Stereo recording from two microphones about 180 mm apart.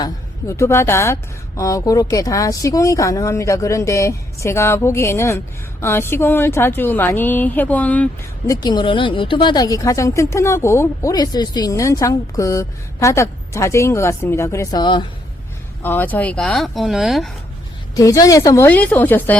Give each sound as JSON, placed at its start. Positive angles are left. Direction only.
{"t": 0.0, "sound": "speech", "side_deg": 15}
{"t": 8.4, "sound": "speech", "side_deg": 20}
{"t": 15.8, "sound": "speech", "side_deg": 10}
{"t": 17.9, "sound": "speech", "side_deg": 20}